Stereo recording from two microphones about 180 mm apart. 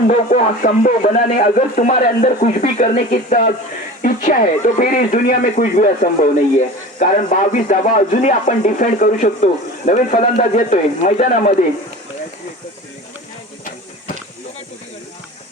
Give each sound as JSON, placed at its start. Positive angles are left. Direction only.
{"t": 0.1, "sound": "speech", "side_deg": 45}